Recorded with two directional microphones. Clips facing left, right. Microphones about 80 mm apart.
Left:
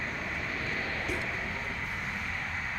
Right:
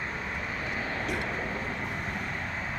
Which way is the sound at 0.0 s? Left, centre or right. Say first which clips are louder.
Right 1 dB; centre.